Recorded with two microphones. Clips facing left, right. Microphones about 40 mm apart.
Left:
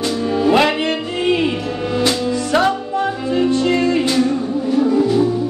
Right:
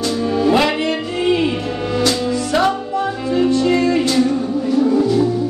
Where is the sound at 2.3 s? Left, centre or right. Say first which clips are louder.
Even; left.